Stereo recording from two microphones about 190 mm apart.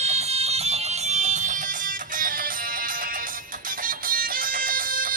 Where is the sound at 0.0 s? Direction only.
35° right (ahead or behind).